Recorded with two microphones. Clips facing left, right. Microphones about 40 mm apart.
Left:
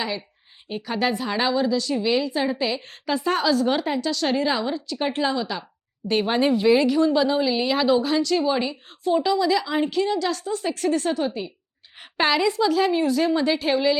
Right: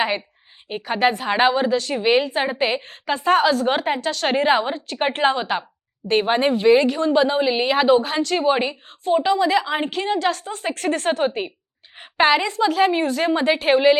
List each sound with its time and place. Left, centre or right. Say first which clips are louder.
0.7 s a woman's voice: right 4 dB; right
6.1 s a woman's voice: right 2 dB; right
11.9 s a sound: right 4 dB; right
12.5 s a woman's voice: right 2 dB; right